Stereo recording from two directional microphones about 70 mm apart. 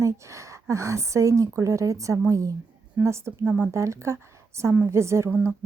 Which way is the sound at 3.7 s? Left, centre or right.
Right.